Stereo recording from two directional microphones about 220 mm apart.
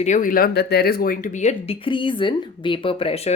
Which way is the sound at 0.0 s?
35° left (ahead or behind).